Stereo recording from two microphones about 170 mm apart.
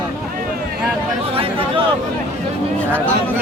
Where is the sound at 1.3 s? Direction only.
35° right (ahead or behind).